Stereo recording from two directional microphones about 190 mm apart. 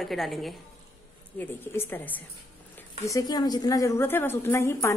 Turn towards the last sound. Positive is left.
turn(degrees=15)  # may be behind; listen again after turning